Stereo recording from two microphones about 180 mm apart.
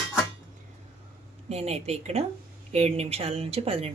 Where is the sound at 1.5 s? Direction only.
35° right (ahead or behind).